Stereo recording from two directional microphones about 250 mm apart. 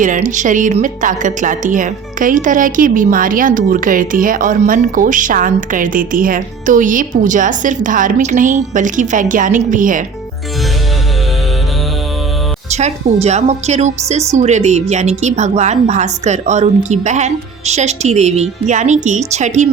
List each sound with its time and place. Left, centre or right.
0.0 s a woman's voice: right
12.7 s a woman's voice: right